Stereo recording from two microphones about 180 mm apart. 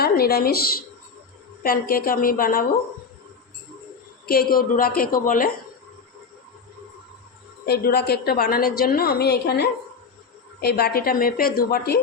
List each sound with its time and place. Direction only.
0.0 s a woman's voice: 60° left (ahead or behind)
4.3 s a woman's voice: 55° left (ahead or behind)
7.6 s a woman's voice: 65° left (ahead or behind)